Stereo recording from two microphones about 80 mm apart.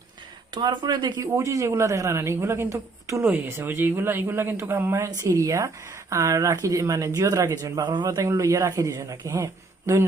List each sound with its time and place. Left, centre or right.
0.5 s speech: right
1.2 s speech: right
3.2 s speech: right
8.0 s speech: right